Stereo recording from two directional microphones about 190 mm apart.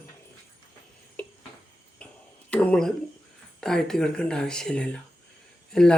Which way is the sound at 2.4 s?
5° left (ahead or behind).